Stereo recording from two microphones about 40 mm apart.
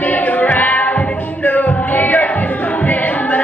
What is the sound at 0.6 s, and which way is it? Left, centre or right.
Music, left.